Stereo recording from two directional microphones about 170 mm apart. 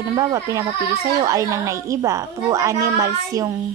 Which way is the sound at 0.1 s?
20° right (ahead or behind).